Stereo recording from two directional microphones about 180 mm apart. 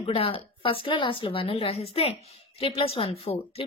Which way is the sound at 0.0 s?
30° left (ahead or behind).